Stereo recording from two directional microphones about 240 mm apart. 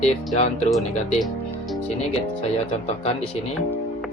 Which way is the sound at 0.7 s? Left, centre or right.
Centre.